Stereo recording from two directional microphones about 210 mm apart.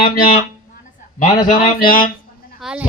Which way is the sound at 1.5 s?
40° left (ahead or behind).